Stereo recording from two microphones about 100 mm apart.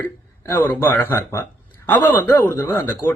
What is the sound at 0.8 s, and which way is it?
Speech, 20° left (ahead or behind).